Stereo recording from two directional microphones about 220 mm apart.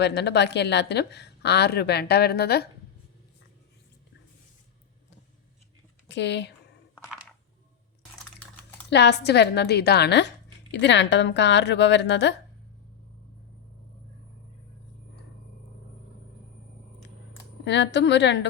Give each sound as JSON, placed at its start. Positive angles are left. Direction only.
{"t": 0.0, "sound": "a woman's voice", "side_deg": 50}
{"t": 6.1, "sound": "speech", "side_deg": 55}
{"t": 8.9, "sound": "a woman's voice", "side_deg": 50}
{"t": 17.7, "sound": "a woman's voice", "side_deg": 55}